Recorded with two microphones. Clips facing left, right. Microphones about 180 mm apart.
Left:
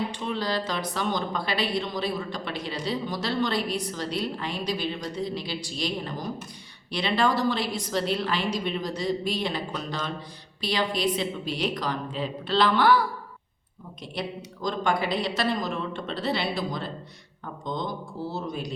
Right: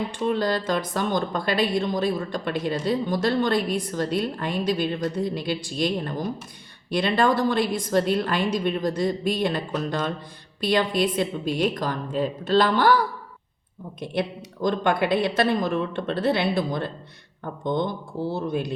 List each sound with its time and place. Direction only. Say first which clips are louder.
0.1 s a woman's voice: right 5 dB; 50° right (ahead or behind)
14.0 s speech: right 6 dB; 55° right (ahead or behind)